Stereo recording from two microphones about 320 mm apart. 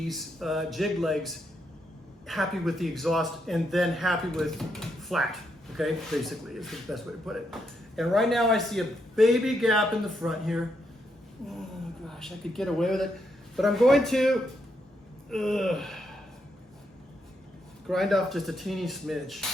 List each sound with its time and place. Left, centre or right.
0.1 s a man's voice: centre
12.0 s a man's voice: centre
17.8 s a man's voice: centre